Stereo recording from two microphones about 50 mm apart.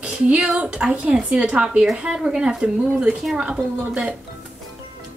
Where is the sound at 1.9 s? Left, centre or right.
Centre.